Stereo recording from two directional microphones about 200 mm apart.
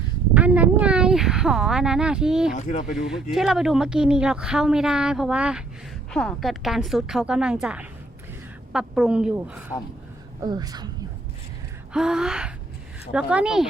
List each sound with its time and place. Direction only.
0.3 s a woman's voice: 5° right (ahead or behind)
2.6 s speech: 40° left (ahead or behind)
3.1 s speech: centre (ahead or behind)
10.4 s a woman's voice: 20° right (ahead or behind)
11.9 s speech: 5° right (ahead or behind)